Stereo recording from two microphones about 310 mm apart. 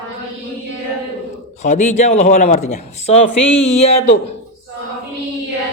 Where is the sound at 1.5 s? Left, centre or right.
Left.